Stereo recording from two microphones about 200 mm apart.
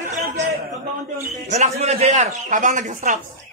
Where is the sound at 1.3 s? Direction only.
35° right (ahead or behind).